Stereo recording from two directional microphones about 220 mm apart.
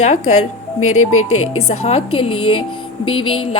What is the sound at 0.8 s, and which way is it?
Speech, 75° left (ahead or behind).